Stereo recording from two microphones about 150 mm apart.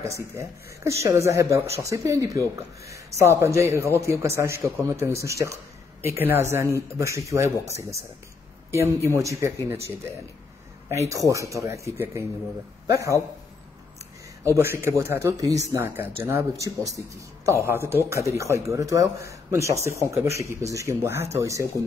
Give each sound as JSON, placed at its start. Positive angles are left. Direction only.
{"t": 0.0, "sound": "a man's voice", "side_deg": -20}
{"t": 11.1, "sound": "a man's voice", "side_deg": -20}
{"t": 14.4, "sound": "a man's voice", "side_deg": -20}